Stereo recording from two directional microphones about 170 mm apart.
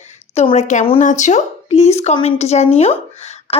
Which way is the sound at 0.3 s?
40° left (ahead or behind).